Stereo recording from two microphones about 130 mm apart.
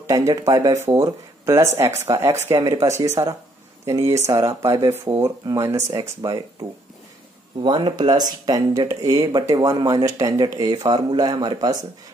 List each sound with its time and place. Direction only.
0.1 s speech: 25° right (ahead or behind)
7.6 s speech: 35° right (ahead or behind)